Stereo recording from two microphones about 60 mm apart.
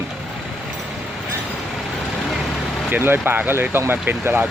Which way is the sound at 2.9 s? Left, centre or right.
Right.